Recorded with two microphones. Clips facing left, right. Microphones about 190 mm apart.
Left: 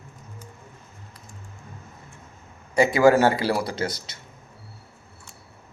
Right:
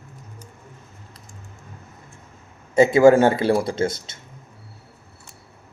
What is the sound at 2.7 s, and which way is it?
Speech, 25° right (ahead or behind).